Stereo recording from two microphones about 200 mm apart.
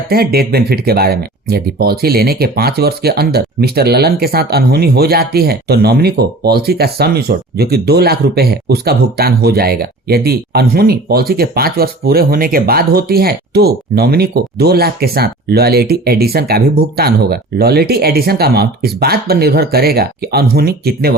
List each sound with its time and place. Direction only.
0.1 s speech: 50° right (ahead or behind)